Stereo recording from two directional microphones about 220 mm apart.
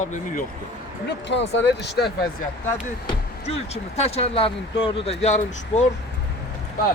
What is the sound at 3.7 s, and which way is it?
Speech, 30° left (ahead or behind).